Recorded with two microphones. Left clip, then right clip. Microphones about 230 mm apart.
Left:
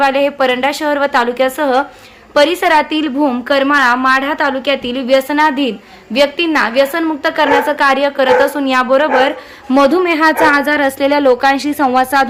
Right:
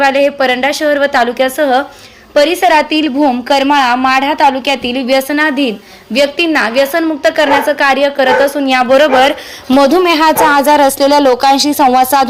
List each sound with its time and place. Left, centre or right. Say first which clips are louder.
0.0 s a woman's voice: right 2 dB; centre